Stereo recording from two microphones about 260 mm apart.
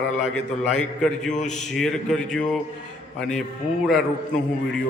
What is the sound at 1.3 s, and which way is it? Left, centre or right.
Speech, left.